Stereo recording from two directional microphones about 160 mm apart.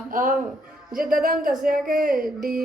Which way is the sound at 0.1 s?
60° right (ahead or behind).